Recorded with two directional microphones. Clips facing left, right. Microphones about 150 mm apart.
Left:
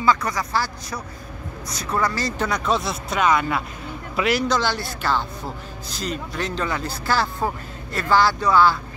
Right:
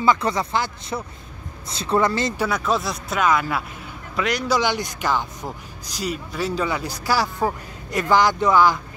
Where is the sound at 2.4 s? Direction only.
5° right (ahead or behind).